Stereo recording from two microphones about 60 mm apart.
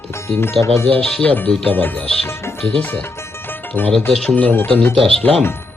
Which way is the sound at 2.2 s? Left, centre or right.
Left.